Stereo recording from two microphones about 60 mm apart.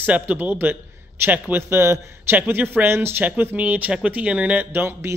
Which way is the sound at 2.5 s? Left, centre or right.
Right.